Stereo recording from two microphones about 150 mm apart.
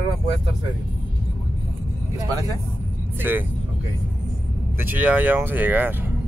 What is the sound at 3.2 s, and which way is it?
Speech, 15° right (ahead or behind).